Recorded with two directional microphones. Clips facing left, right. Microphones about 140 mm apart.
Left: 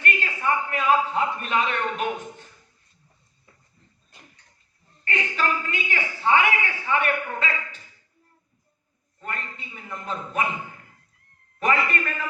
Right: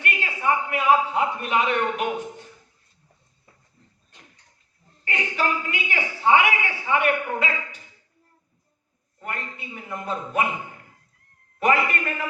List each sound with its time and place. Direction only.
0.0 s a man's voice: 10° right (ahead or behind)
5.0 s a man's voice: 15° right (ahead or behind)
9.2 s a man's voice: 15° right (ahead or behind)
11.6 s a man's voice: 15° right (ahead or behind)